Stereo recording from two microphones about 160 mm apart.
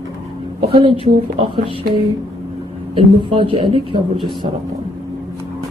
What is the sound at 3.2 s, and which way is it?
Speech, 30° right (ahead or behind).